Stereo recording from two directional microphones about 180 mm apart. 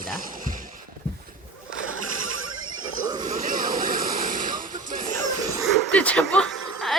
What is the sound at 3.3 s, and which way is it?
Vehicle, 45° right (ahead or behind).